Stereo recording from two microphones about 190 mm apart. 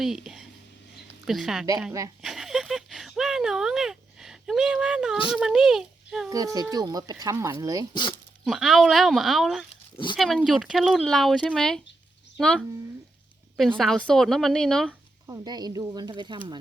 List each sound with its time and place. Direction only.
0.0 s speech: centre (ahead or behind)
2.2 s a sound: centre (ahead or behind)
5.3 s speech: 5° right (ahead or behind)
6.3 s speech: 20° right (ahead or behind)
8.4 s speech: centre (ahead or behind)
13.7 s speech: centre (ahead or behind)
15.3 s speech: 20° right (ahead or behind)